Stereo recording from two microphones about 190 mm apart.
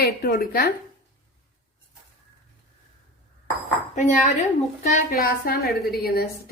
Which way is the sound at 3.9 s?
40° left (ahead or behind).